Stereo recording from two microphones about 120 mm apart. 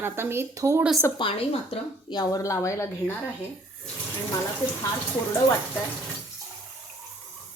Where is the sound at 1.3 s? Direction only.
55° left (ahead or behind).